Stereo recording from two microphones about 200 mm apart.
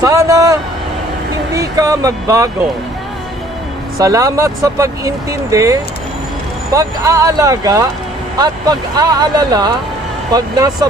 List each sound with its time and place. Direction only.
0.0 s speech: 15° right (ahead or behind)
4.0 s speech: 15° right (ahead or behind)